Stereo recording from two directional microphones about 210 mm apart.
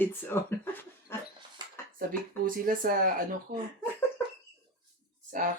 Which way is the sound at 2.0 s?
40° right (ahead or behind).